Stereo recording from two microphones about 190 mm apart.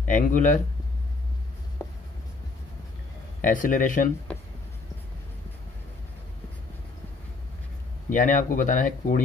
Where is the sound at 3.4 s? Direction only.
45° left (ahead or behind).